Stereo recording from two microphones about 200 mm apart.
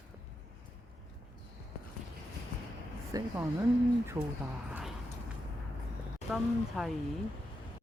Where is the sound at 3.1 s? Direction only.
15° right (ahead or behind).